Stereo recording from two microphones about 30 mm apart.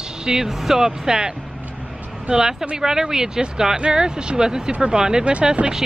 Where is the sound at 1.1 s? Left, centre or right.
Right.